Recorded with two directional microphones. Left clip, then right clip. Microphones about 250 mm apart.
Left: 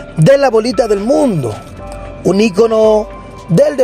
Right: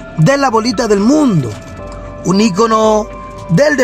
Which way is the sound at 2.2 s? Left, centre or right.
Centre.